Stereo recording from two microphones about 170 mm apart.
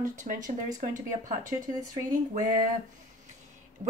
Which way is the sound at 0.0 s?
45° right (ahead or behind).